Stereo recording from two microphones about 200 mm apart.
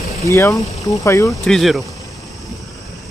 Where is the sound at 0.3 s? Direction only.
15° left (ahead or behind).